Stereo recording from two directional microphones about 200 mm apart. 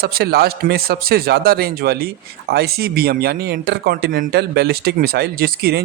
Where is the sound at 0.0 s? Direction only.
50° right (ahead or behind).